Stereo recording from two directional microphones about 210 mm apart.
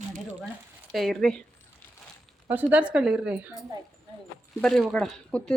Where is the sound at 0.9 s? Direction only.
Centre (ahead or behind).